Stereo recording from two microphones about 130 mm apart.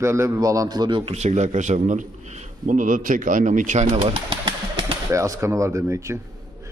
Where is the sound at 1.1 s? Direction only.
60° right (ahead or behind).